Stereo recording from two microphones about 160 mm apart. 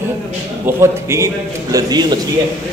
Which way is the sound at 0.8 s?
15° right (ahead or behind).